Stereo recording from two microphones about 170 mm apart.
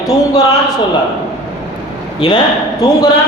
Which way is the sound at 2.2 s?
25° left (ahead or behind).